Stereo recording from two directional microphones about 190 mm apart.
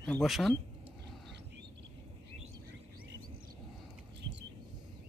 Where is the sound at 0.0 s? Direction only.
5° left (ahead or behind).